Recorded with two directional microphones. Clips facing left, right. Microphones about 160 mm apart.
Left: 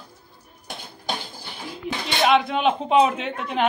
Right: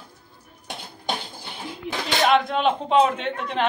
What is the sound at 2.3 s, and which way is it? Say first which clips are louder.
Speech: left 1 dB; centre (ahead or behind).